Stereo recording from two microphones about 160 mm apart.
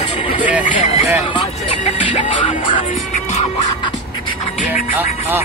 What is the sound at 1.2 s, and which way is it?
Speech, 35° left (ahead or behind).